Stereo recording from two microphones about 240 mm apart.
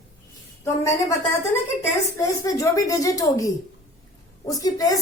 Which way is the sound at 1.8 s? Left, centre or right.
Centre.